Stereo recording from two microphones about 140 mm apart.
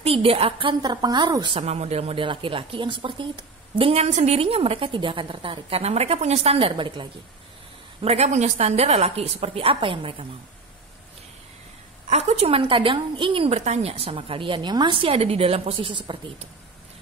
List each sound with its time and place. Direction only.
0.0 s speech: 45° right (ahead or behind)
1.6 s speech: 50° right (ahead or behind)
8.0 s a woman's voice: 50° right (ahead or behind)
12.1 s speech: 50° right (ahead or behind)